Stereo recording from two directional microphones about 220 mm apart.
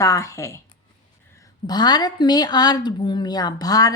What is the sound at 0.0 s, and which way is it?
Speech, 15° left (ahead or behind).